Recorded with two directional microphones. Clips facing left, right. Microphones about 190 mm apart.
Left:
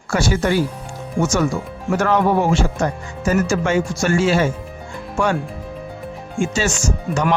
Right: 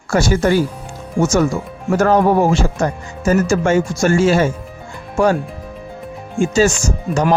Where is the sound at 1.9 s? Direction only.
40° right (ahead or behind).